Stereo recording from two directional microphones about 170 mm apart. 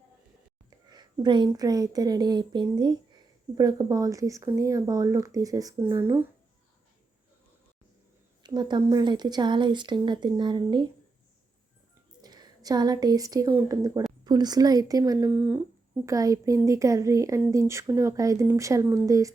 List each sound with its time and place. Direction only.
0.9 s a sound: 25° right (ahead or behind)
1.5 s speech: 20° right (ahead or behind)
8.4 s speech: 25° right (ahead or behind)
12.2 s a woman's voice: 25° right (ahead or behind)
15.4 s speech: 10° right (ahead or behind)
16.0 s speech: 20° right (ahead or behind)